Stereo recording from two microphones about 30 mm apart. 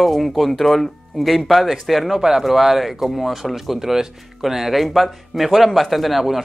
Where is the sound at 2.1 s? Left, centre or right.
Centre.